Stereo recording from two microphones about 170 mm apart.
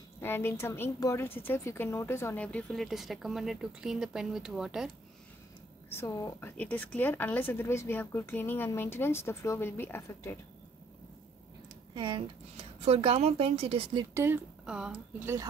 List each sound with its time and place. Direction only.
0.2 s a woman's voice: 15° left (ahead or behind); by 4.9 s 5° right (ahead or behind)
5.9 s a woman's voice: 15° left (ahead or behind)
11.9 s a woman's voice: 25° right (ahead or behind)
14.1 s speech: 15° right (ahead or behind)